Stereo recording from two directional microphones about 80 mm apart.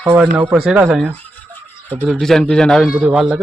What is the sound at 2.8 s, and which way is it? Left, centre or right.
Speech, centre.